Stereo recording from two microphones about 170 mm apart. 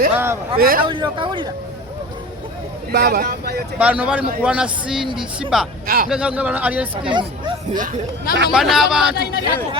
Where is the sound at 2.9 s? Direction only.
65° right (ahead or behind).